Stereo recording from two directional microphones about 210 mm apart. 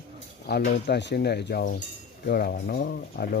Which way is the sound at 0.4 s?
50° left (ahead or behind).